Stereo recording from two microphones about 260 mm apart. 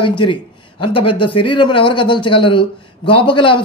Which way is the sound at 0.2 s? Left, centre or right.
Centre.